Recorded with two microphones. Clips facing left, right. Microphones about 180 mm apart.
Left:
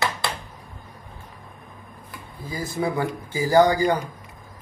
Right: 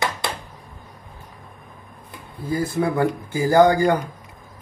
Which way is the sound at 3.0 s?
55° right (ahead or behind).